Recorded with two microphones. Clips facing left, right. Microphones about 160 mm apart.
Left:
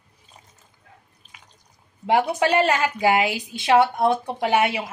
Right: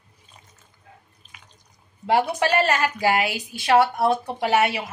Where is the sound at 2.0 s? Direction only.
15° left (ahead or behind).